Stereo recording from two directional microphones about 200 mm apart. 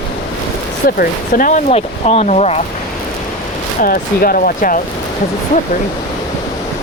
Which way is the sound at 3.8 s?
45° left (ahead or behind).